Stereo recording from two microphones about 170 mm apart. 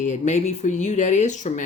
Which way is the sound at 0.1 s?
40° left (ahead or behind).